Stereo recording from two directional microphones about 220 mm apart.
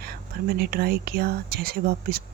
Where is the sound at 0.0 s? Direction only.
45° right (ahead or behind).